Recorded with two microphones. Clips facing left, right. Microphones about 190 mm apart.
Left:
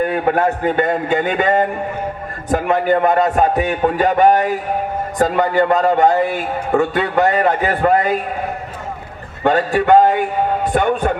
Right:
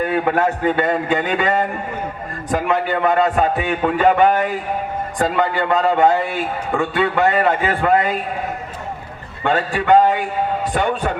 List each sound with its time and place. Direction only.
0.0 s a man's voice: 45° left (ahead or behind)
9.4 s a man's voice: 40° left (ahead or behind)